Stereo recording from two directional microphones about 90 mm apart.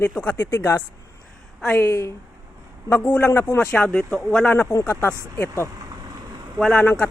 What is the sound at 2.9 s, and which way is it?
A woman's voice, 15° left (ahead or behind).